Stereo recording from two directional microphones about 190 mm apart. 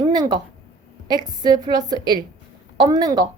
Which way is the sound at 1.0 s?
20° right (ahead or behind).